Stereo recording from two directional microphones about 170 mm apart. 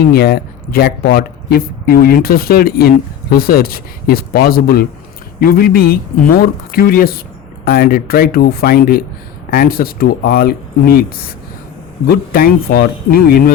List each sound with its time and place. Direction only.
0.1 s speech: 65° left (ahead or behind)